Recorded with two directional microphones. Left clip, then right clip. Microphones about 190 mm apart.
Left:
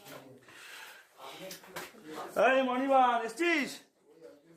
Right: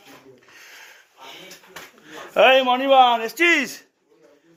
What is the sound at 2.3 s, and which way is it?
Speech, 45° right (ahead or behind).